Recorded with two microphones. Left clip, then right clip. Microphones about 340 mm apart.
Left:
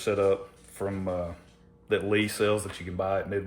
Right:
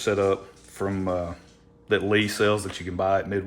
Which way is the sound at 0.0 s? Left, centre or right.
Right.